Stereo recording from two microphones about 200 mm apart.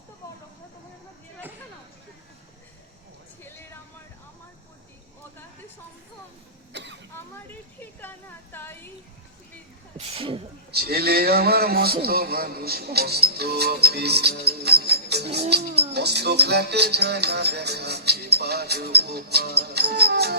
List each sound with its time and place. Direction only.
3.4 s a sound: 10° left (ahead or behind)
6.7 s cough: 60° right (ahead or behind)
7.2 s a sound: 10° left (ahead or behind)
10.0 s sneeze: 30° right (ahead or behind)
10.7 s a man's voice: 50° right (ahead or behind)
15.7 s music: 55° right (ahead or behind)